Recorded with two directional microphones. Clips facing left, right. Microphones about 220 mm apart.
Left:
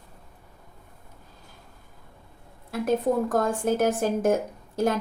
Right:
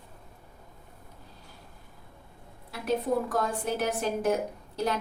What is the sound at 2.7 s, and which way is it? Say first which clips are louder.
A woman's voice: left 4 dB; 45° left (ahead or behind).